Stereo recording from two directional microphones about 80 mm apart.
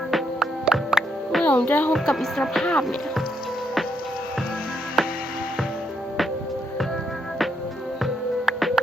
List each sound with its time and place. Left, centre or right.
0.1 s music: centre
1.5 s speech: centre
1.9 s speech: centre
5.0 s music: centre
8.0 s music: centre